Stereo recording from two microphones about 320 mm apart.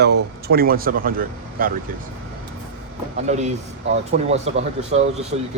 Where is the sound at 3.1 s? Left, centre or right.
Right.